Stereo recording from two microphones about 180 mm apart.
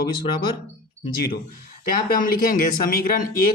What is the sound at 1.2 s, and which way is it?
Speech, 55° left (ahead or behind).